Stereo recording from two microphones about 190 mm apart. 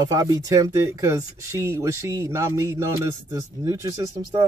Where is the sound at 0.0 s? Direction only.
20° right (ahead or behind).